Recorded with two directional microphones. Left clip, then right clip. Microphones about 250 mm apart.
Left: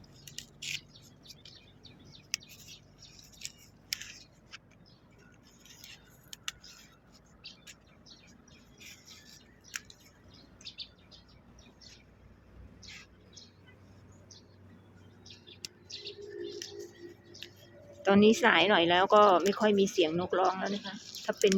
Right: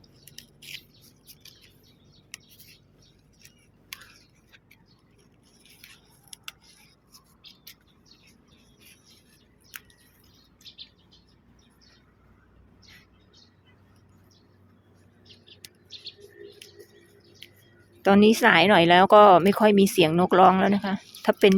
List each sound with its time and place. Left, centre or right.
0.3 s bird: centre
2.3 s bird: centre
18.0 s speech: centre